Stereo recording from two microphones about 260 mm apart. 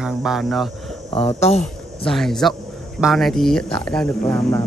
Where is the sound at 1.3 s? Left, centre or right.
Left.